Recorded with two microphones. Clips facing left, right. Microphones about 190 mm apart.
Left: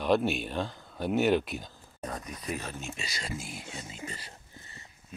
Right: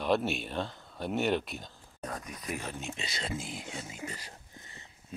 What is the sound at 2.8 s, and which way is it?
Speech, 20° right (ahead or behind).